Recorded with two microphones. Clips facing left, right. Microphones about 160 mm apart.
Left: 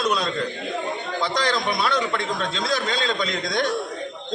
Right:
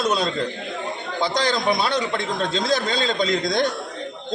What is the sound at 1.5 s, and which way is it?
Speech, 30° right (ahead or behind).